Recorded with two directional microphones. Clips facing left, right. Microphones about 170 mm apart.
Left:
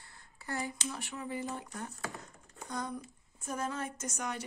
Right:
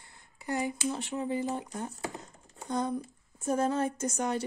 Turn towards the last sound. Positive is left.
turn(degrees=-30)  # may be behind; listen again after turning